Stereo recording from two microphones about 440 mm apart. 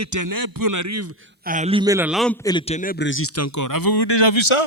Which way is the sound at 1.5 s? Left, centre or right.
Centre.